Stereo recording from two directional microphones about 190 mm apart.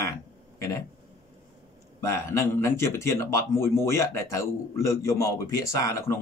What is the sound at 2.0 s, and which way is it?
Speech, 15° left (ahead or behind).